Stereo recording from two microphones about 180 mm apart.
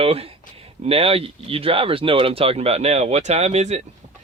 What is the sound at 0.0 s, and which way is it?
Speech, 30° right (ahead or behind).